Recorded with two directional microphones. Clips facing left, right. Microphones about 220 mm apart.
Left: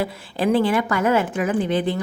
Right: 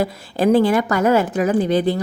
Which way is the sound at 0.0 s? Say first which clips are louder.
Right 4 dB; 40° right (ahead or behind).